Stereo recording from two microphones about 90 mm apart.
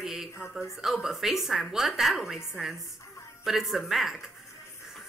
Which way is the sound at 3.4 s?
Centre (ahead or behind).